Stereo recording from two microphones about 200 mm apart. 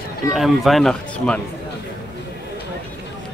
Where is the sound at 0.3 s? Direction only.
Centre (ahead or behind).